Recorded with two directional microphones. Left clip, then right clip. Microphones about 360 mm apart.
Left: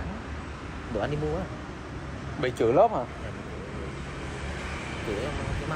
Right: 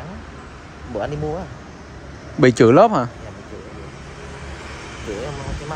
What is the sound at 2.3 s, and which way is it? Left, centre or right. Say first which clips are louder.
Speech: right 11 dB; right.